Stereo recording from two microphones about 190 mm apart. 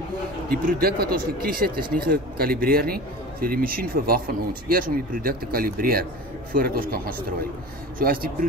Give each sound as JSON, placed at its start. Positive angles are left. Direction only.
{"t": 0.5, "sound": "speech", "side_deg": -50}
{"t": 8.0, "sound": "speech", "side_deg": -50}